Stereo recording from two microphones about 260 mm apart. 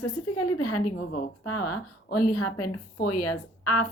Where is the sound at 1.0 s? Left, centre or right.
Left.